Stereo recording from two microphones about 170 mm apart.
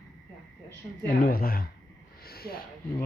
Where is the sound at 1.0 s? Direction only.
60° left (ahead or behind).